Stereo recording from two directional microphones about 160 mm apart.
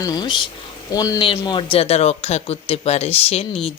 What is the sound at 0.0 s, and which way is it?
Speech, 25° left (ahead or behind).